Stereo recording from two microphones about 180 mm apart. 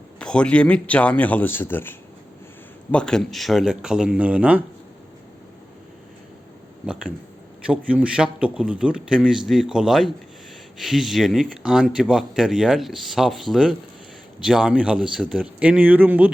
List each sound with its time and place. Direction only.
0.2 s a man's voice: 5° left (ahead or behind)
6.8 s speech: 5° right (ahead or behind)